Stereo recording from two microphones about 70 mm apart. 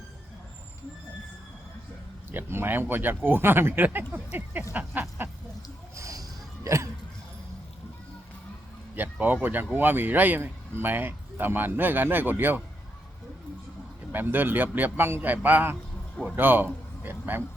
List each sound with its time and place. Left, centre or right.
2.3 s speech: right
6.0 s a sound: right
9.0 s speech: right
14.1 s speech: right